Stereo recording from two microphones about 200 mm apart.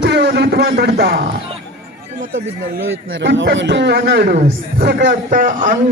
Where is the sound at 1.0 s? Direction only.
55° right (ahead or behind).